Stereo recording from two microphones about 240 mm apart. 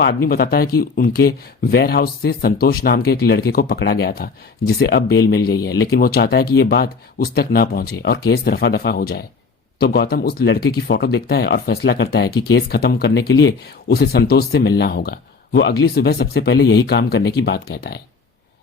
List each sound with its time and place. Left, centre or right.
0.3 s speech: left